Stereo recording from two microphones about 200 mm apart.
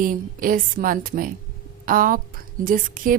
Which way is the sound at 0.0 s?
45° right (ahead or behind).